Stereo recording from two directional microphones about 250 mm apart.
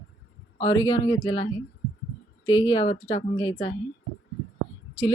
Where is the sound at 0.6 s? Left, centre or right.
Centre.